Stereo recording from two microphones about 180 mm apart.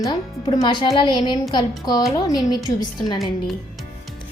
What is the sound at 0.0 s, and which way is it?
Speech, 20° left (ahead or behind).